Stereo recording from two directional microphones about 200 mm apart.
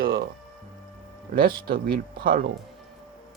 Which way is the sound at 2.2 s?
45° right (ahead or behind).